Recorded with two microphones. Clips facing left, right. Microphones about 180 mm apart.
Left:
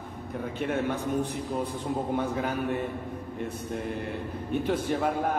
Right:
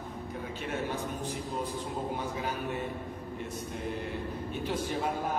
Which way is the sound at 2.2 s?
55° left (ahead or behind).